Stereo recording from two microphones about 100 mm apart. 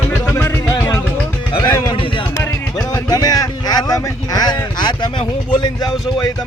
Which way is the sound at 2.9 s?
40° left (ahead or behind).